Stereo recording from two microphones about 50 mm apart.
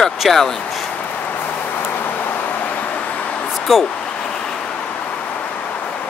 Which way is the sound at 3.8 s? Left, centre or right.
Centre.